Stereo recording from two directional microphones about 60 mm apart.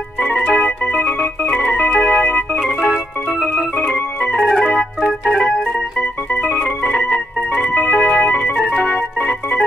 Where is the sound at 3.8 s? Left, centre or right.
Centre.